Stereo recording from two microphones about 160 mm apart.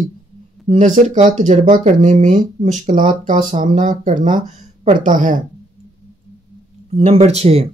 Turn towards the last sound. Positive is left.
turn(degrees=-40)  # may be behind; listen again after turning